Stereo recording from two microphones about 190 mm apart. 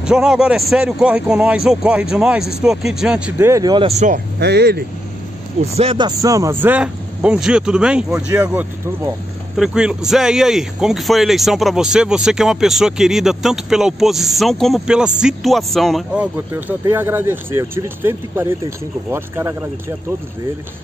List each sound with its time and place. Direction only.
0.0 s speech: 5° right (ahead or behind)
3.8 s speech: 40° right (ahead or behind)
4.4 s speech: 55° right (ahead or behind)
5.6 s speech: 30° right (ahead or behind); by 16.3 s centre (ahead or behind)
16.3 s speech: 10° right (ahead or behind)